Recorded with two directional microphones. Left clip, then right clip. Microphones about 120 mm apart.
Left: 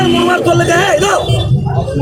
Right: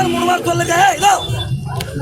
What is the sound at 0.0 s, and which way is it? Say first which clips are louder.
Battle cry: left 4 dB; 20° right (ahead or behind).